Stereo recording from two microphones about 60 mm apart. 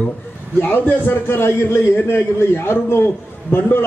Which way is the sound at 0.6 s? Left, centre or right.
Left.